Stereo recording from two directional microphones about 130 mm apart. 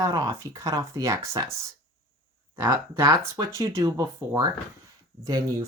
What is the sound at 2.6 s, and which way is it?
Speech, 30° right (ahead or behind).